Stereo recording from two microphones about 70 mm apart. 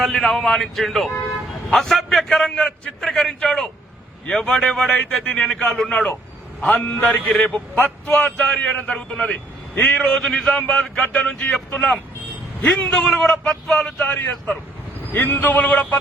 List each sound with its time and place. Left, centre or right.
0.0 s a man's voice: centre
14.0 s a man's voice: centre